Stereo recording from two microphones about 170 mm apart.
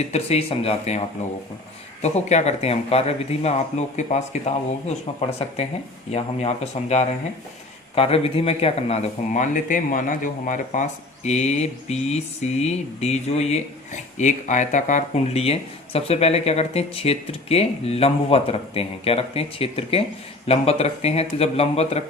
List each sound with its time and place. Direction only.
0.0 s speech: 40° left (ahead or behind)
6.1 s speech: 40° left (ahead or behind)